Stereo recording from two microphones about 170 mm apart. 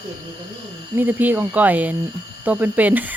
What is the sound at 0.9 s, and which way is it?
Speech, 10° right (ahead or behind).